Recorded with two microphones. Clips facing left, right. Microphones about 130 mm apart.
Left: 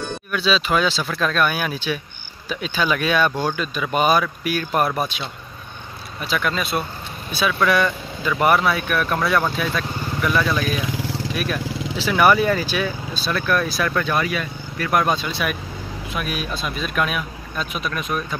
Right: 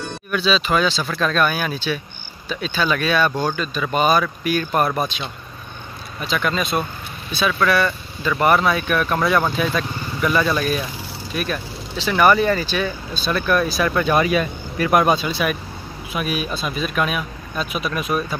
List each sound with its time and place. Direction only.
0.3 s speech: centre (ahead or behind)
11.0 s vehicle: 90° left
11.3 s speech: 5° left (ahead or behind)
13.9 s speech: 20° right (ahead or behind)